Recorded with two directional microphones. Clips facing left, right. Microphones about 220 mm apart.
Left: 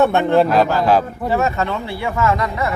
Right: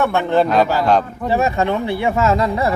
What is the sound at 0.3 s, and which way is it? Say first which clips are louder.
Speech: even; 5° left (ahead or behind).